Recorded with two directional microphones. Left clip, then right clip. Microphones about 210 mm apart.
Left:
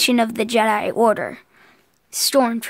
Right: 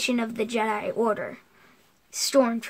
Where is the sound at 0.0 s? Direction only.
45° left (ahead or behind).